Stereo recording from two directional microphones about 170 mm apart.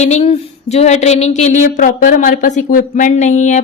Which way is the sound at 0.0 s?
40° left (ahead or behind).